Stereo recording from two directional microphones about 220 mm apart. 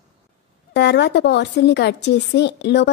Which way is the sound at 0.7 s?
50° left (ahead or behind).